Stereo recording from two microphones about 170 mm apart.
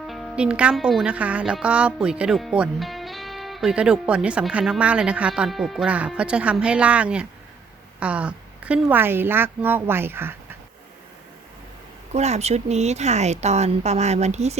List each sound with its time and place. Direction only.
0.1 s a woman's voice: 5° right (ahead or behind)
12.1 s speech: 40° right (ahead or behind)